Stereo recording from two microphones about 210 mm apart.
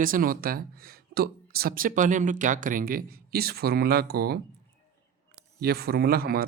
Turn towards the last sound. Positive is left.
turn(degrees=-45)  # may be behind; listen again after turning